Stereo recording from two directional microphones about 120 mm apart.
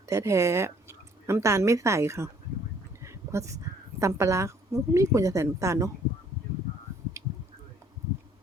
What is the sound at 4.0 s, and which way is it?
Speech, 25° right (ahead or behind).